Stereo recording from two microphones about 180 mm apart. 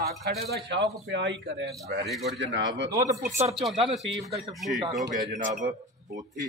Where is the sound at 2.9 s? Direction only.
20° right (ahead or behind).